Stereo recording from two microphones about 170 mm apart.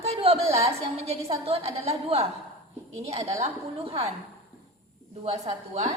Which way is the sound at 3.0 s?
40° right (ahead or behind).